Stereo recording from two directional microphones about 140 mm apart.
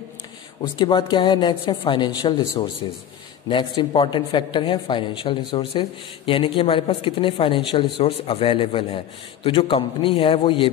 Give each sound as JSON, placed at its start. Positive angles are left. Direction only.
{"t": 0.6, "sound": "speech", "side_deg": 35}